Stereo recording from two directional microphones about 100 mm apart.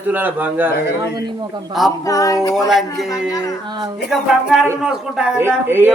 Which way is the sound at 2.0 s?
35° left (ahead or behind).